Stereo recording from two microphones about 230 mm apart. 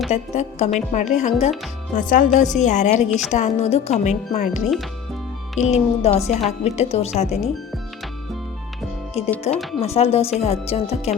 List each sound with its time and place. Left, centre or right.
0.1 s a woman's voice: left
3.1 s a woman's voice: centre
3.3 s a woman's voice: left
9.2 s speech: left